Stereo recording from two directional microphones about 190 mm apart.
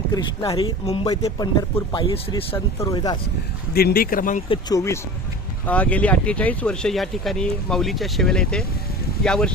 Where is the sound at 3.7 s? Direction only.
55° left (ahead or behind).